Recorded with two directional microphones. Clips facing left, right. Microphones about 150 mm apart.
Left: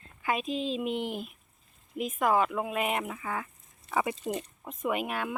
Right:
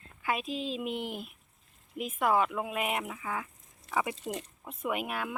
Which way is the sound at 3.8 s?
90° right.